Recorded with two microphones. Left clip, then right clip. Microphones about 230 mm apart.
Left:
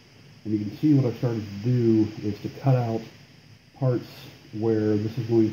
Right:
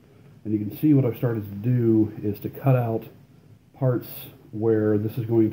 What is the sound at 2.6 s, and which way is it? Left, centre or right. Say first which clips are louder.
Speech: right 2 dB; centre.